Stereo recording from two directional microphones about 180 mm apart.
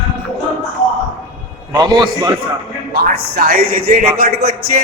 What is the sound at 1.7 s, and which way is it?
Speech, 25° right (ahead or behind).